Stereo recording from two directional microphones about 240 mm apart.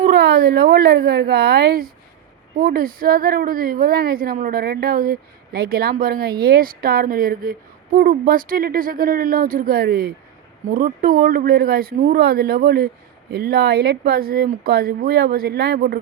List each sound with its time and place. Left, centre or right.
0.0 s a woman's voice: right